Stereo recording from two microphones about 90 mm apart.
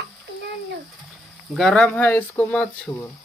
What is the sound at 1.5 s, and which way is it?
Speech, 5° left (ahead or behind).